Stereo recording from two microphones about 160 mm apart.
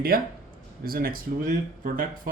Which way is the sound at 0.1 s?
65° right (ahead or behind).